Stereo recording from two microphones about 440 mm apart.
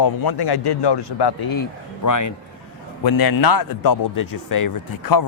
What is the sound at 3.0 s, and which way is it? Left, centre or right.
A man's voice, left.